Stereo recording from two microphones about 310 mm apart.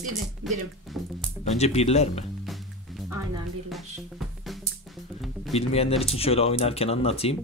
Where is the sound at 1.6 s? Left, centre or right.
Centre.